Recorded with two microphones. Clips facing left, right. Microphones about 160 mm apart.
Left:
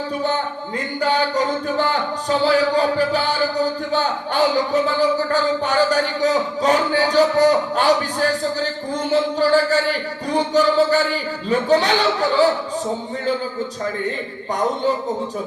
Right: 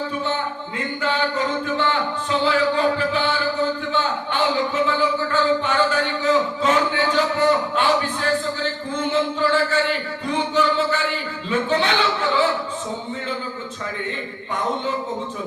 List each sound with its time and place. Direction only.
1.6 s music: 40° left (ahead or behind)
9.4 s music: 40° left (ahead or behind)